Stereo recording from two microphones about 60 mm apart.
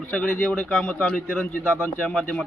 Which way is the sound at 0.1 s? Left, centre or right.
Centre.